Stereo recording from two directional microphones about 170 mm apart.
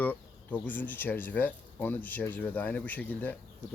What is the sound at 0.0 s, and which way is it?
Speech, 10° left (ahead or behind).